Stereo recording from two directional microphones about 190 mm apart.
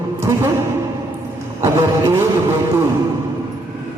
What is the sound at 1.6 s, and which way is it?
Speech, 15° right (ahead or behind).